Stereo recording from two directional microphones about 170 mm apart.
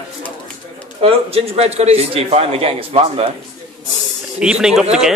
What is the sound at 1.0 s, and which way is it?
Speech, 35° right (ahead or behind).